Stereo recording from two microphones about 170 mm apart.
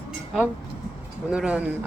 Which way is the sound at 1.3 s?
5° right (ahead or behind).